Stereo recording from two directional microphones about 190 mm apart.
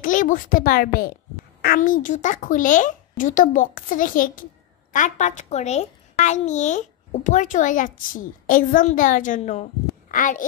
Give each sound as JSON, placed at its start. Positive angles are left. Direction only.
{"t": 0.0, "sound": "a child's voice", "side_deg": 45}